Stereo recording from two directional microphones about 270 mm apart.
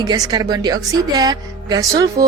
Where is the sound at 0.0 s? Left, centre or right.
Centre.